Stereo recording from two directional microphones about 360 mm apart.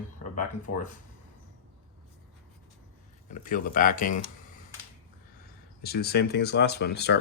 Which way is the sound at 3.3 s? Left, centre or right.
Left.